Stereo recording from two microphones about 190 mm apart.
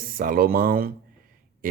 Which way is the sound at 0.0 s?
50° right (ahead or behind).